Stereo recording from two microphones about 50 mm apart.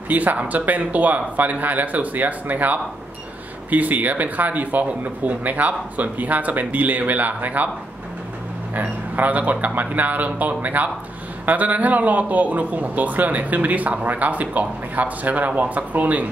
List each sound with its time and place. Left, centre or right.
0.1 s a man's voice: right
9.1 s a man's voice: right